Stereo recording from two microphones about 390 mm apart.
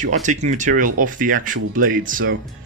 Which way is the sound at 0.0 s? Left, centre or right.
Centre.